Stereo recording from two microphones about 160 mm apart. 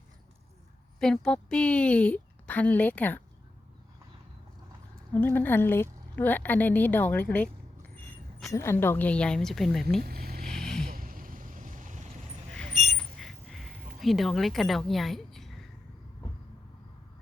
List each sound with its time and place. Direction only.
0.9 s a woman's voice: 5° left (ahead or behind)
5.1 s a woman's voice: 10° left (ahead or behind)
8.4 s a woman's voice: 15° left (ahead or behind); by 9.8 s centre (ahead or behind)
10.0 s speech: 70° right (ahead or behind)
10.4 s vehicle: 5° left (ahead or behind)
10.8 s vehicle: 65° right (ahead or behind); by 12.4 s 45° right (ahead or behind)
12.9 s a sound: centre (ahead or behind)